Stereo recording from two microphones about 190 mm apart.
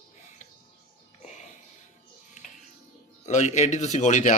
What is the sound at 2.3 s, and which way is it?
Music, 40° left (ahead or behind).